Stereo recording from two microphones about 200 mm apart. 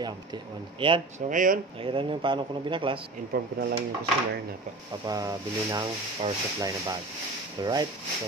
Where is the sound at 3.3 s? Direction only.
50° right (ahead or behind).